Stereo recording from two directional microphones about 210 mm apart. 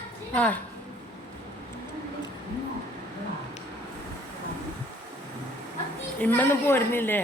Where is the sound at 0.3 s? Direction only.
5° left (ahead or behind).